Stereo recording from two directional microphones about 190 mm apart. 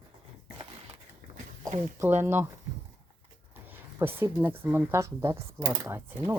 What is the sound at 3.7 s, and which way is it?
Speech, 10° right (ahead or behind).